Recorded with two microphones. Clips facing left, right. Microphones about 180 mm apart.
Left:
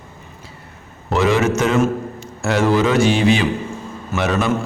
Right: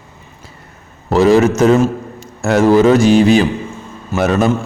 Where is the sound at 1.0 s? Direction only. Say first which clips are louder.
Right 6 dB; 40° right (ahead or behind).